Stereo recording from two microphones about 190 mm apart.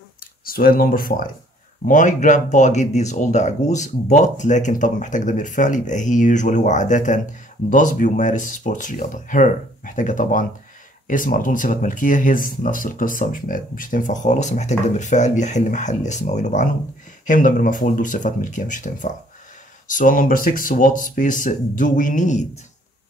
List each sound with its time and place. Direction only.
0.5 s speech: 50° left (ahead or behind)